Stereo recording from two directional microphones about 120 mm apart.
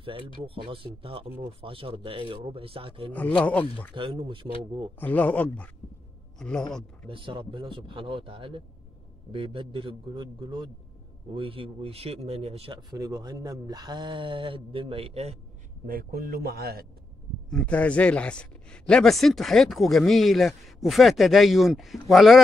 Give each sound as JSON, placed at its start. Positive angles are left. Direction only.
{"t": 0.4, "sound": "speech", "side_deg": -50}
{"t": 3.1, "sound": "speech", "side_deg": 10}
{"t": 3.9, "sound": "speech", "side_deg": -45}
{"t": 5.0, "sound": "a man's voice", "side_deg": 15}
{"t": 7.1, "sound": "speech", "side_deg": -45}
{"t": 12.9, "sound": "speech", "side_deg": -30}
{"t": 17.5, "sound": "speech", "side_deg": 5}